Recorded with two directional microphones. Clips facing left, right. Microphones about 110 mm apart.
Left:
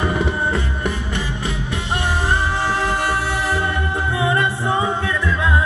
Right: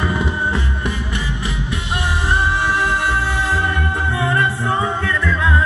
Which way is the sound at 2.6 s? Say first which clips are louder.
Right 1 dB; 30° left (ahead or behind).